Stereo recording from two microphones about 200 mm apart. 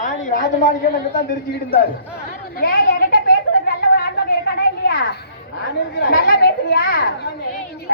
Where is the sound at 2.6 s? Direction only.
45° left (ahead or behind).